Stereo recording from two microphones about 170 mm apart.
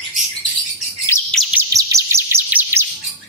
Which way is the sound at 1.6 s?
20° right (ahead or behind).